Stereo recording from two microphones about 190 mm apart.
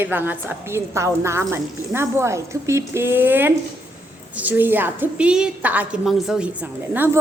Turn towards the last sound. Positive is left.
turn(degrees=-10)  # may be behind; listen again after turning